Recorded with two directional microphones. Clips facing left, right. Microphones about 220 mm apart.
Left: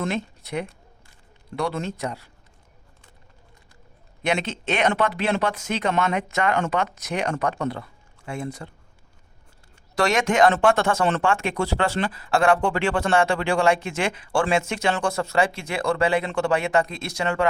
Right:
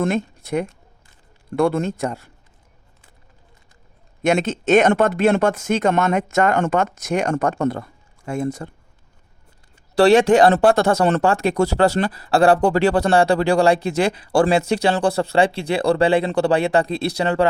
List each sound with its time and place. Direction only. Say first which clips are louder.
0.0 s speech: right 6 dB; 45° right (ahead or behind)
4.2 s speech: right 7 dB; 45° right (ahead or behind)
9.9 s speech: right 9 dB; 35° right (ahead or behind)